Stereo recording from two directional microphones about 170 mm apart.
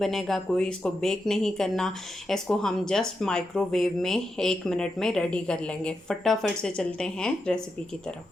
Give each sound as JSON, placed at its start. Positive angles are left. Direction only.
{"t": 0.0, "sound": "speech", "side_deg": 0}